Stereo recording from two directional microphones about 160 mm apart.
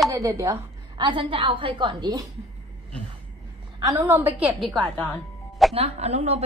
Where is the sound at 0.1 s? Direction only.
20° right (ahead or behind).